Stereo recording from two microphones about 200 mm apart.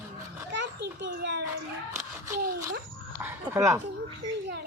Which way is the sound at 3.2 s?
10° right (ahead or behind).